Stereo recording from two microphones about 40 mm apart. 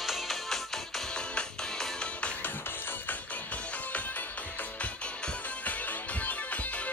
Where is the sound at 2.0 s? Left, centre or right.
Left.